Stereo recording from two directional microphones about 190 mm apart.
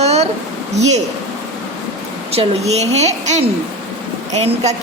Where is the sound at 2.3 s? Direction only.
30° right (ahead or behind).